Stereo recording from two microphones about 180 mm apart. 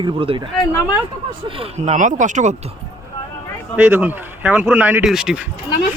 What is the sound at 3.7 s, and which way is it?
A man's voice, 10° right (ahead or behind).